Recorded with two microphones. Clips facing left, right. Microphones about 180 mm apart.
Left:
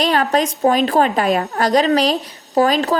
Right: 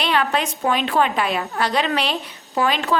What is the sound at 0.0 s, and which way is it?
A woman's voice, 40° left (ahead or behind).